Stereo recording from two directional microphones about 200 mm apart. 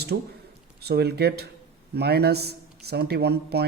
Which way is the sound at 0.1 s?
50° right (ahead or behind).